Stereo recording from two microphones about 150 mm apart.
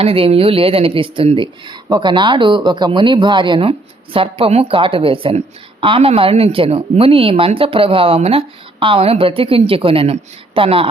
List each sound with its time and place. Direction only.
0.0 s speech: 40° right (ahead or behind)